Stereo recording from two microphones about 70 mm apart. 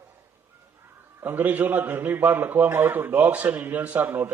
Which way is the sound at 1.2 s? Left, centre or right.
Right.